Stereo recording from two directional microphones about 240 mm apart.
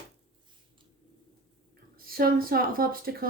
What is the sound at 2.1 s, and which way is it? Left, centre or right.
Speech, right.